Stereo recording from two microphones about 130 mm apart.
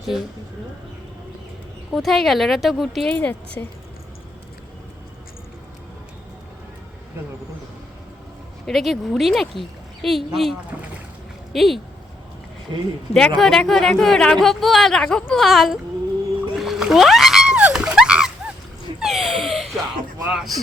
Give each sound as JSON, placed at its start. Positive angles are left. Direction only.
{"t": 1.9, "sound": "speech", "side_deg": 0}
{"t": 8.6, "sound": "speech", "side_deg": 0}
{"t": 12.7, "sound": "speech", "side_deg": -35}
{"t": 13.1, "sound": "speech", "side_deg": 5}
{"t": 16.6, "sound": "a sound", "side_deg": -5}
{"t": 20.2, "sound": "speech", "side_deg": -10}